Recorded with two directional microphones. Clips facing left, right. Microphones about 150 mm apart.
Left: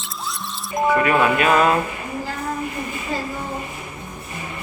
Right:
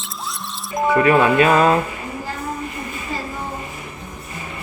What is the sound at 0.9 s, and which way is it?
Speech, 30° right (ahead or behind).